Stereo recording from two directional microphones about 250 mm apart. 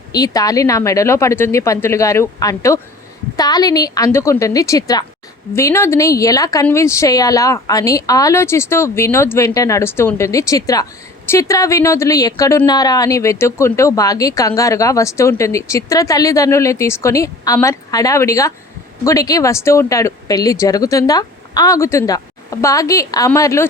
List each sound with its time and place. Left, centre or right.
0.1 s speech: centre